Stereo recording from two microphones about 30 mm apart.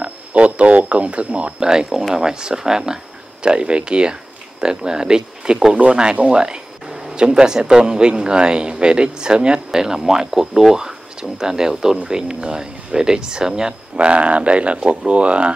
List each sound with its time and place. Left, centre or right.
0.0 s speech: right
1.6 s speech: right
3.4 s speech: right
9.7 s speech: centre
13.9 s speech: right